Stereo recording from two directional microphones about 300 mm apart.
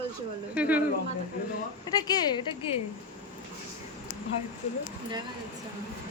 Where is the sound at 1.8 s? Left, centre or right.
Centre.